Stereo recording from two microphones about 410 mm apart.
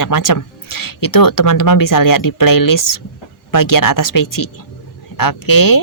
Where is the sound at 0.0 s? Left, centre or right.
Left.